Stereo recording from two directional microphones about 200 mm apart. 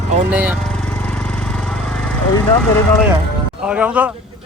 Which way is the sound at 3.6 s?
5° right (ahead or behind).